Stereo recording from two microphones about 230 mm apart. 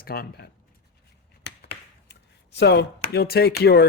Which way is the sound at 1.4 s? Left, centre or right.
Left.